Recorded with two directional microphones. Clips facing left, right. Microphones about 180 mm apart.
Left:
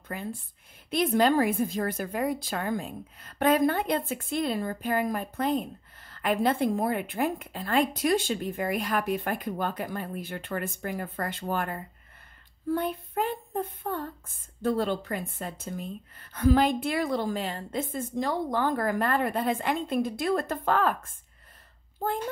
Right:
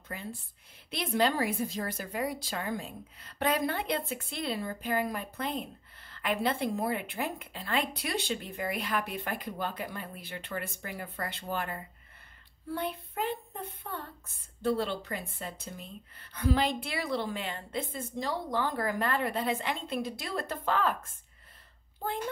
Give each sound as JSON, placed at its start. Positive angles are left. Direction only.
{"t": 0.8, "sound": "a woman's voice", "side_deg": 50}